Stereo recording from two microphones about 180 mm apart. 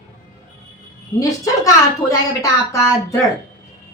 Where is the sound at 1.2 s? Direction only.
20° left (ahead or behind).